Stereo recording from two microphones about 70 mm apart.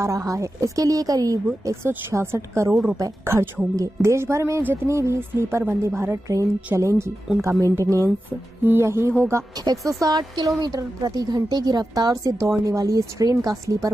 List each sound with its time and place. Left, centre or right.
0.0 s a woman's voice: right
7.3 s speech: centre
7.7 s speech: right
8.3 s speech: right
8.8 s a woman's voice: right
9.7 s a woman's voice: right